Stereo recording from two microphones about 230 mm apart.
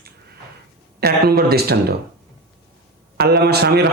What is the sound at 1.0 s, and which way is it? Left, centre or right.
Speech, right.